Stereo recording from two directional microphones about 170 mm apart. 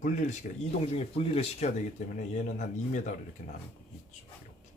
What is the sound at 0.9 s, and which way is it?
Speech, 35° left (ahead or behind).